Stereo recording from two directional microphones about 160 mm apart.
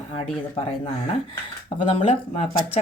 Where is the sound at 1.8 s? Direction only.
35° left (ahead or behind).